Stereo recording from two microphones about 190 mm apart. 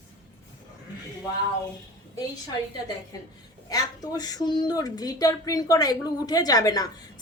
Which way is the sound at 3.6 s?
20° left (ahead or behind).